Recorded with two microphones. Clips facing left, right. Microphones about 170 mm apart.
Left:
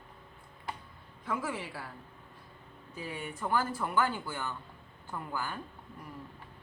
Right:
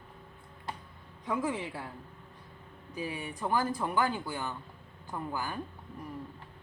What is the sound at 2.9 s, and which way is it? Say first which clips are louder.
A woman's voice: right 3 dB; 15° right (ahead or behind).